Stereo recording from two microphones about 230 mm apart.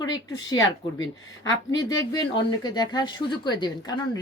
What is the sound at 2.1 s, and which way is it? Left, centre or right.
A woman's voice, centre.